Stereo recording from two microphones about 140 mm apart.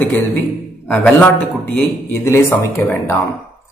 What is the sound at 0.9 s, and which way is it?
A man's voice, 15° left (ahead or behind).